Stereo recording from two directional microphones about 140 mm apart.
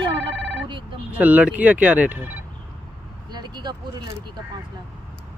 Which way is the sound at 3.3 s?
30° right (ahead or behind).